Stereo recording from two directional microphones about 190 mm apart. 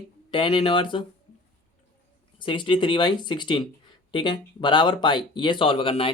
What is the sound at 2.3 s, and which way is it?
Speech, 25° left (ahead or behind).